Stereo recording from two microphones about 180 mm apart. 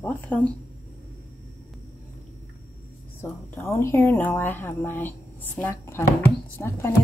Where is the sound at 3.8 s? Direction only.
10° left (ahead or behind).